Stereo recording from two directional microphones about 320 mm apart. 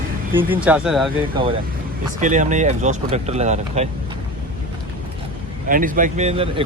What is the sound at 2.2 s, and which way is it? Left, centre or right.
Speech, right.